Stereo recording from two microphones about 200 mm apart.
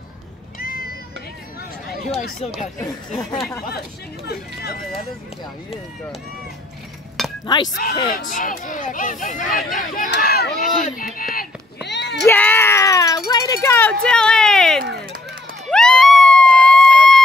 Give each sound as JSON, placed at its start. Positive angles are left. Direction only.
{"t": 0.6, "sound": "music", "side_deg": 45}
{"t": 2.4, "sound": "speech", "side_deg": 30}
{"t": 4.3, "sound": "speech", "side_deg": 50}
{"t": 7.2, "sound": "chink", "side_deg": 0}
{"t": 8.1, "sound": "speech", "side_deg": 40}
{"t": 10.1, "sound": "speech", "side_deg": 55}
{"t": 11.1, "sound": "a sound", "side_deg": 45}
{"t": 12.3, "sound": "a sound", "side_deg": 10}